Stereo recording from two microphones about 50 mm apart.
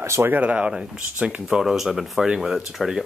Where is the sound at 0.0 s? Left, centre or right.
Right.